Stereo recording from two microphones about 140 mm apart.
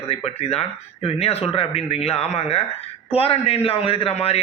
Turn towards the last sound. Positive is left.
turn(degrees=45)  # may be behind; listen again after turning